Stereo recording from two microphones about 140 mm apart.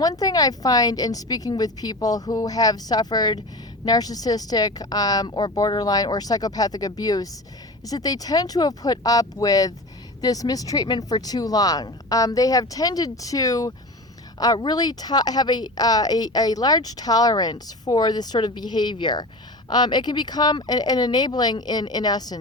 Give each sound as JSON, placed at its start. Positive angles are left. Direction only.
{"t": 0.0, "sound": "a woman's voice", "side_deg": 25}